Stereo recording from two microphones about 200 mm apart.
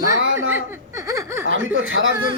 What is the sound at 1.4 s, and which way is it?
Speech, 80° right.